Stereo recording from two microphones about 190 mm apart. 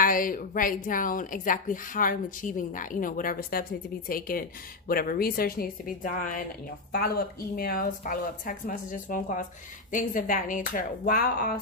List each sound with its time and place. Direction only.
0.0 s speech: 45° left (ahead or behind)
7.5 s speech: 50° left (ahead or behind)